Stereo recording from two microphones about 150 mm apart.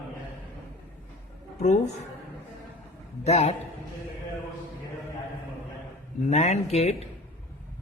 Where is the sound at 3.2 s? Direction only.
45° left (ahead or behind).